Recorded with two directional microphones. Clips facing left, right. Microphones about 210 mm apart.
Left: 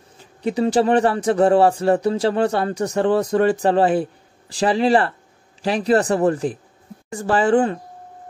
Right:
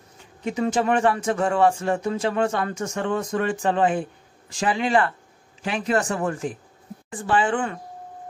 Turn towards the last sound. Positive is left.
turn(degrees=35)  # may be behind; listen again after turning